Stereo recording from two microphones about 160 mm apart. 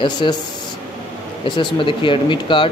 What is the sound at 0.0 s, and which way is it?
Speech, 30° left (ahead or behind).